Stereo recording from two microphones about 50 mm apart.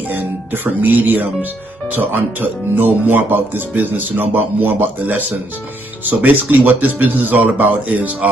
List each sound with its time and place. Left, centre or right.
0.1 s speech: right